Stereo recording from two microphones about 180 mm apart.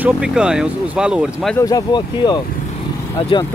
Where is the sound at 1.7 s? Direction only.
25° left (ahead or behind).